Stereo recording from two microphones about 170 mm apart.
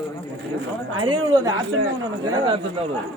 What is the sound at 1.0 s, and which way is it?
Speech, 25° right (ahead or behind).